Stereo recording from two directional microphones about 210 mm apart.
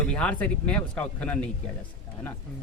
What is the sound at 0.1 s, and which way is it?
Speech, 5° left (ahead or behind).